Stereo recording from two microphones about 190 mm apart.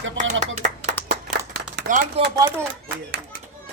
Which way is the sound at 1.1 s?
55° right (ahead or behind).